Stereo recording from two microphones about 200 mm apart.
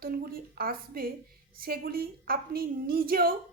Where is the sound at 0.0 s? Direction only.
50° right (ahead or behind).